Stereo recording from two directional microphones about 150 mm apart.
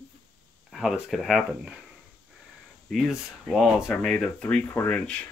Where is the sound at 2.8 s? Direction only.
Centre (ahead or behind).